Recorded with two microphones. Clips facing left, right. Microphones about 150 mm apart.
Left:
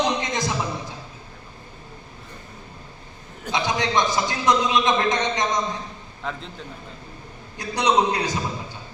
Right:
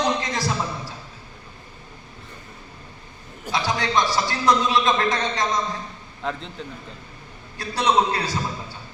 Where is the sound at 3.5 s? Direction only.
20° left (ahead or behind).